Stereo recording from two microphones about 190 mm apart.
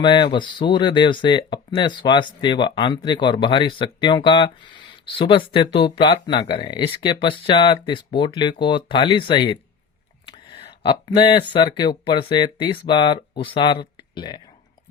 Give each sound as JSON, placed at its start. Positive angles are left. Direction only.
{"t": 0.0, "sound": "speech", "side_deg": 25}